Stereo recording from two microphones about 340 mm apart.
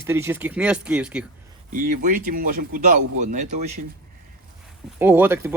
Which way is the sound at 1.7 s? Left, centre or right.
Right.